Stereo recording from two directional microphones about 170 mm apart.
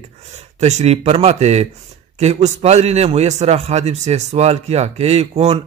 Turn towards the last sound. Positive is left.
turn(degrees=-40)  # may be behind; listen again after turning